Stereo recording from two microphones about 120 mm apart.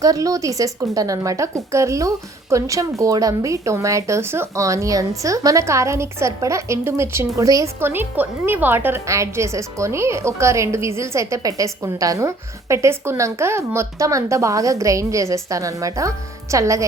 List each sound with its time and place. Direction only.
0.0 s speech: 30° right (ahead or behind)